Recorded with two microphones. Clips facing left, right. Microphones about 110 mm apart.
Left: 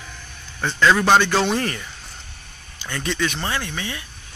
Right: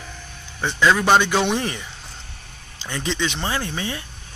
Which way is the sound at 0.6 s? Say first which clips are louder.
Left 1 dB; 10° right (ahead or behind).